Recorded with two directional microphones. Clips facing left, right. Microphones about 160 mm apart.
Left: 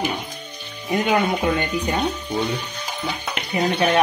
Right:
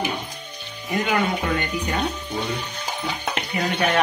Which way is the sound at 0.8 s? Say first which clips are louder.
Left 3 dB; 20° left (ahead or behind).